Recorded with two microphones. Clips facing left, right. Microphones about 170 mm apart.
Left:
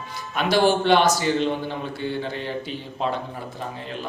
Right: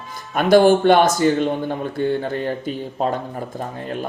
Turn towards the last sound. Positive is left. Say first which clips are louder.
# right 5 dB
turn(degrees=-45)  # may be behind; listen again after turning